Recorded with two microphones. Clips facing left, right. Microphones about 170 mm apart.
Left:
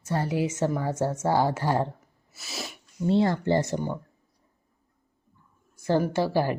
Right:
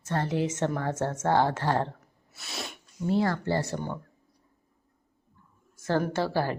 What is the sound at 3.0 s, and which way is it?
Speech, 25° left (ahead or behind).